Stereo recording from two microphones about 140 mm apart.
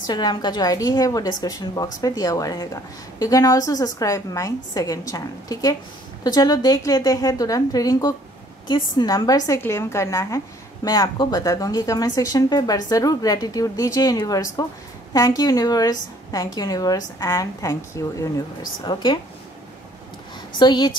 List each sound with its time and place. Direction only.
0.0 s a woman's voice: 30° left (ahead or behind)
18.9 s speech: 35° left (ahead or behind)
20.5 s speech: 30° left (ahead or behind)